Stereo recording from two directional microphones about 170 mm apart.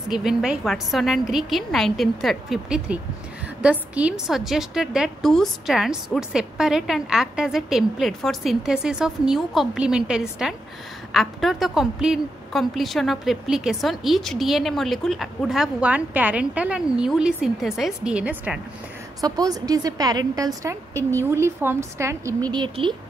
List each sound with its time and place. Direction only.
0.1 s a woman's voice: 5° right (ahead or behind)
19.2 s a woman's voice: 25° right (ahead or behind)
22.5 s a woman's voice: 25° right (ahead or behind)